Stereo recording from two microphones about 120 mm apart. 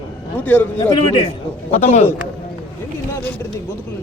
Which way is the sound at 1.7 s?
80° left.